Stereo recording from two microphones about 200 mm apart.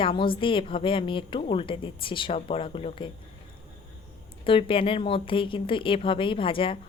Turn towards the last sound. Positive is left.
turn(degrees=25)  # may be behind; listen again after turning